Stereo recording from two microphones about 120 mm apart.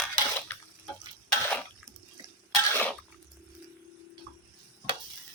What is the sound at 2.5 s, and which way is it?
Cough, 15° left (ahead or behind).